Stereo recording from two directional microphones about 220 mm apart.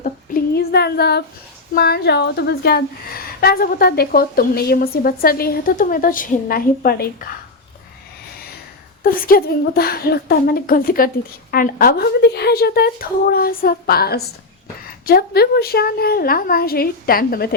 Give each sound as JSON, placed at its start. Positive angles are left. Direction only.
{"t": 0.0, "sound": "a sound", "side_deg": 45}
{"t": 1.7, "sound": "a woman's voice", "side_deg": 45}
{"t": 9.0, "sound": "a woman's voice", "side_deg": 40}